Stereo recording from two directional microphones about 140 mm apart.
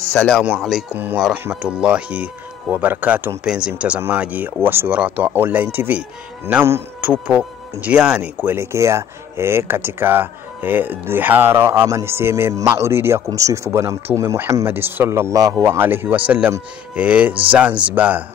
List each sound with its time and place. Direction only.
0.1 s speech: 5° left (ahead or behind)
0.4 s speech: 5° right (ahead or behind)
0.9 s speech: 15° right (ahead or behind)